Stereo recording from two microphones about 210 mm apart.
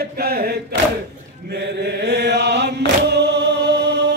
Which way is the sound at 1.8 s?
50° right (ahead or behind).